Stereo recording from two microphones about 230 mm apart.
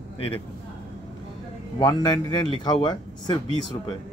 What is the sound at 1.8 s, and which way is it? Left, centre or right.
A man's voice, centre.